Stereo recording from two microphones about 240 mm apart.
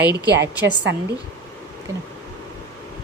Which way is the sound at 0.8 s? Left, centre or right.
Right.